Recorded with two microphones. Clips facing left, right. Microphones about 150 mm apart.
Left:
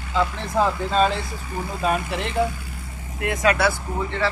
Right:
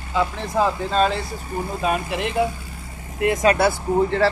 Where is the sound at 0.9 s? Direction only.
Centre (ahead or behind).